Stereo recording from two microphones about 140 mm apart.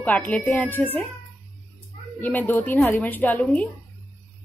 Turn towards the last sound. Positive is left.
turn(degrees=10)  # may be behind; listen again after turning